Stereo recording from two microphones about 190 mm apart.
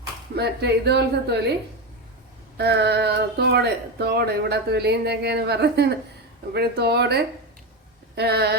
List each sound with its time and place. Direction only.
0.3 s speech: 60° right (ahead or behind)
2.6 s speech: 60° right (ahead or behind)